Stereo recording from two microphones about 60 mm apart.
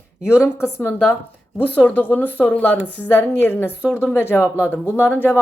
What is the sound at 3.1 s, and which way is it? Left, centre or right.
A woman's voice, left.